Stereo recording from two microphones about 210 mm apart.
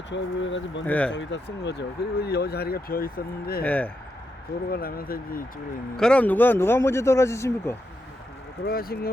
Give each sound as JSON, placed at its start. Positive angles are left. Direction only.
{"t": 0.1, "sound": "speech", "side_deg": 60}
{"t": 0.9, "sound": "speech", "side_deg": 5}
{"t": 1.1, "sound": "speech", "side_deg": 60}
{"t": 3.6, "sound": "speech", "side_deg": 5}
{"t": 4.7, "sound": "speech", "side_deg": 45}
{"t": 6.0, "sound": "speech", "side_deg": 5}
{"t": 8.6, "sound": "speech", "side_deg": 45}